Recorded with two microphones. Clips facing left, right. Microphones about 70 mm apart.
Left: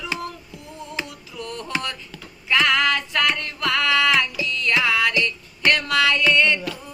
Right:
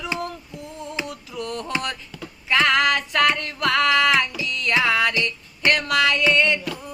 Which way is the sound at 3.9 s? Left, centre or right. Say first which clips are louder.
Right 1 dB; right.